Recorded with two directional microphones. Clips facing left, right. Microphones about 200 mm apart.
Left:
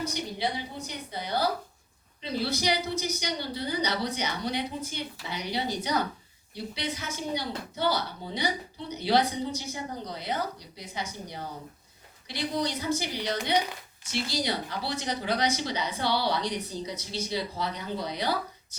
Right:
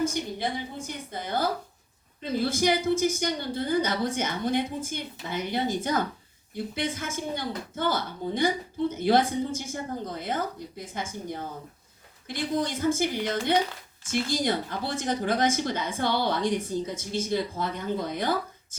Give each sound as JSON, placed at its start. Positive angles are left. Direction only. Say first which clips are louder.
{"t": 0.0, "sound": "a woman's voice", "louder": "right 3 dB", "side_deg": -50}